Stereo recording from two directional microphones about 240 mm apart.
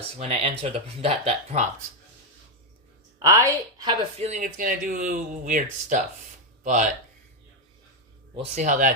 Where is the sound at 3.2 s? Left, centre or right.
Centre; by 6.9 s right.